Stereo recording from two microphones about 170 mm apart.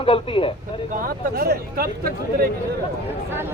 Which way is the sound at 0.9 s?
55° right (ahead or behind).